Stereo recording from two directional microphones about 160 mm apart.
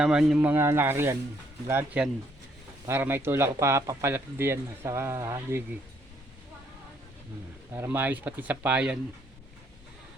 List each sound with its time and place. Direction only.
0.0 s speech: 5° right (ahead or behind)
7.7 s speech: 15° right (ahead or behind)